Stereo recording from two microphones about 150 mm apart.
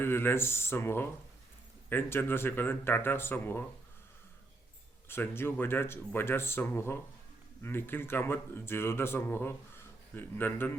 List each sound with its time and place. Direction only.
0.0 s a man's voice: 15° left (ahead or behind)
5.0 s a man's voice: 15° left (ahead or behind)